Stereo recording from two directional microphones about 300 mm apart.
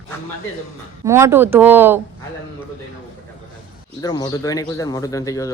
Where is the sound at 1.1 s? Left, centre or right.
Centre.